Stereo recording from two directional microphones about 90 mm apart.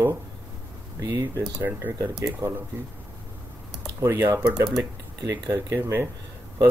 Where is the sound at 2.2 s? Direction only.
35° right (ahead or behind).